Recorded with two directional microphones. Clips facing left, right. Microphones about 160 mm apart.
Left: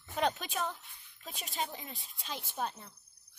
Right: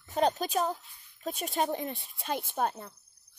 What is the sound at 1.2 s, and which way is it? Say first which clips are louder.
A woman's voice: right 9 dB; 50° right (ahead or behind).